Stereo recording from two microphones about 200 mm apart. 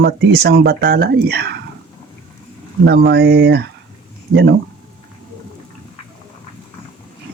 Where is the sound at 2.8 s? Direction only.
55° right (ahead or behind).